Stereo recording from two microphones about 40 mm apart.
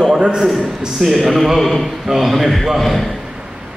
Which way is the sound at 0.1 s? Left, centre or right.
Centre.